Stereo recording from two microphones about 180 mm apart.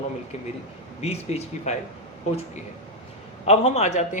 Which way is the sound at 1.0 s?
35° left (ahead or behind).